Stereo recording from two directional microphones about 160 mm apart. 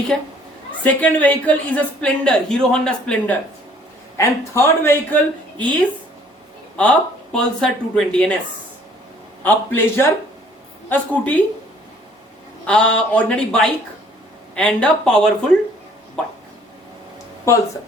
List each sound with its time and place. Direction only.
0.1 s a woman's voice: 5° left (ahead or behind)
6.7 s speech: 5° left (ahead or behind)
9.4 s a woman's voice: 10° left (ahead or behind)
12.6 s a woman's voice: 5° left (ahead or behind)